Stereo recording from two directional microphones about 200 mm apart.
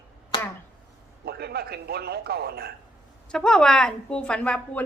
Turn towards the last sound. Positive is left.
turn(degrees=5)  # may be behind; listen again after turning